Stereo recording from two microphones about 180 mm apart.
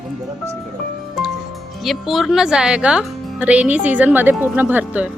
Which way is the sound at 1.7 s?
Centre (ahead or behind).